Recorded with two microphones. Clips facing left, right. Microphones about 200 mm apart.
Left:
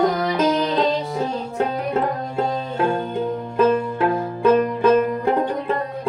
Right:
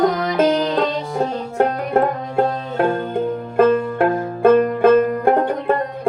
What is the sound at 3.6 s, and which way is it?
Music, 55° right (ahead or behind).